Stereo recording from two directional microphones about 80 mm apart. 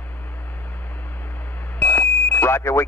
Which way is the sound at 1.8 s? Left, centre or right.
Left.